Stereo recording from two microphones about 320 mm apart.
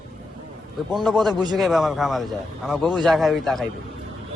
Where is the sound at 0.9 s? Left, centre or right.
Centre.